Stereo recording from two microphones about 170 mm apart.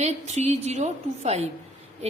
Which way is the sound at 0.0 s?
40° right (ahead or behind).